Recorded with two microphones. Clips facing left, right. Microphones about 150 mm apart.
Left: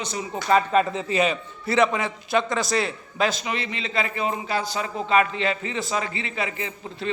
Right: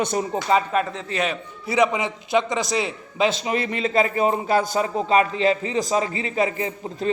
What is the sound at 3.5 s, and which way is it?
A man's voice, 50° right (ahead or behind).